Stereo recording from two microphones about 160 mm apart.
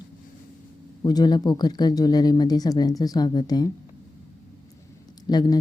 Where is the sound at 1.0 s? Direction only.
25° left (ahead or behind).